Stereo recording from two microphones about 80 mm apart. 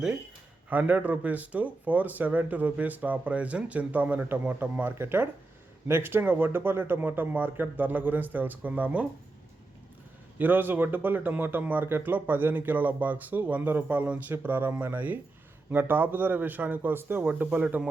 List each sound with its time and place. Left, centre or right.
0.7 s speech: centre
10.3 s speech: right